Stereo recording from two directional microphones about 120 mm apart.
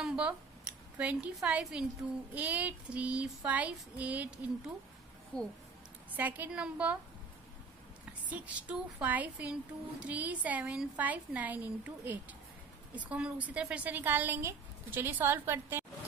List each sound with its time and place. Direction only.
0.0 s a woman's voice: 5° right (ahead or behind)
5.3 s speech: 10° left (ahead or behind)
6.1 s a woman's voice: 15° right (ahead or behind)
8.0 s a woman's voice: 10° right (ahead or behind)